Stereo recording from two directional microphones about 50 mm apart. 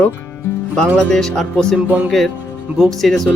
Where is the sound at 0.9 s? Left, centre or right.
Centre.